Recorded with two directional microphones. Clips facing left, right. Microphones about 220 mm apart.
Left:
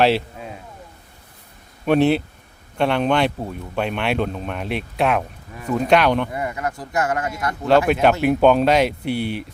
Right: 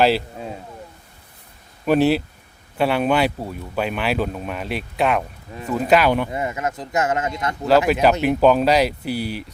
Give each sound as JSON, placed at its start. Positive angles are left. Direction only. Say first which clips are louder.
{"t": 1.8, "sound": "speech", "louder": "even", "side_deg": 0}
{"t": 6.3, "sound": "speech", "louder": "right 1 dB", "side_deg": -20}
{"t": 7.7, "sound": "speech", "louder": "even", "side_deg": 0}